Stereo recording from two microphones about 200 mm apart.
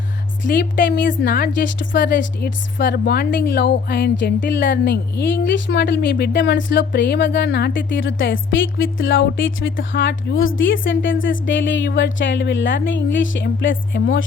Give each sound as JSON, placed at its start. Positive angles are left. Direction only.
{"t": 0.5, "sound": "a woman's voice", "side_deg": 45}